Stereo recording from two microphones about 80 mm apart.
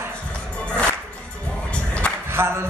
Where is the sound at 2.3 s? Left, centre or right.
Right.